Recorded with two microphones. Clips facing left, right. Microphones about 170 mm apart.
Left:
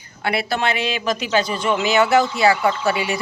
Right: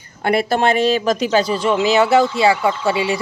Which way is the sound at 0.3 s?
45° right (ahead or behind).